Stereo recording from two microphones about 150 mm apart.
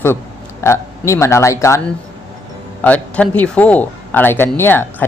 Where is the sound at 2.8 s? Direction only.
10° left (ahead or behind).